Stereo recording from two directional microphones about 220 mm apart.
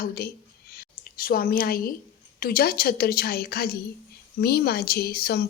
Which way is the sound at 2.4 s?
45° left (ahead or behind).